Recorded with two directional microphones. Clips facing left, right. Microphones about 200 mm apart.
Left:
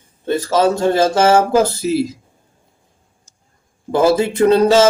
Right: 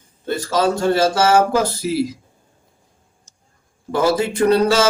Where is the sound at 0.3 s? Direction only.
25° left (ahead or behind).